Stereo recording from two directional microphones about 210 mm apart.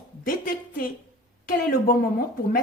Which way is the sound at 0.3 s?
40° left (ahead or behind).